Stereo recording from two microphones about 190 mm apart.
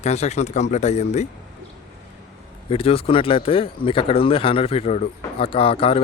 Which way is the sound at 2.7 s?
30° left (ahead or behind).